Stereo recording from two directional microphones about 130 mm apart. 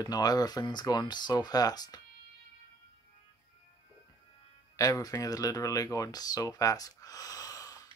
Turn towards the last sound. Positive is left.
turn(degrees=30)  # may be behind; listen again after turning